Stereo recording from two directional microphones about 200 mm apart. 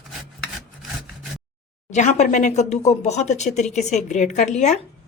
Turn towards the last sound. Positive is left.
turn(degrees=35)  # may be behind; listen again after turning